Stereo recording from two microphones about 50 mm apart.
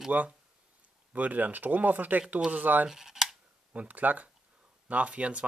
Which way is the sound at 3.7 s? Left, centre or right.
Right.